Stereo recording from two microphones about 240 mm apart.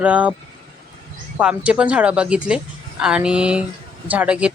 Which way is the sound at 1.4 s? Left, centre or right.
Centre.